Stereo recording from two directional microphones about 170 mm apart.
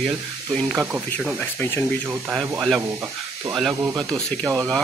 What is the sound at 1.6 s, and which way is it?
Speech, 15° left (ahead or behind).